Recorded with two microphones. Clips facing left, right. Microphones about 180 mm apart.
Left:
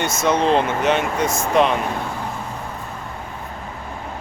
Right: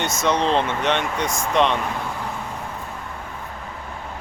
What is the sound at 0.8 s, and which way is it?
Speech, 5° left (ahead or behind).